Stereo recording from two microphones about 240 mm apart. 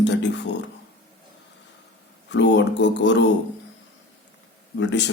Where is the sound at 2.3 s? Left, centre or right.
Left.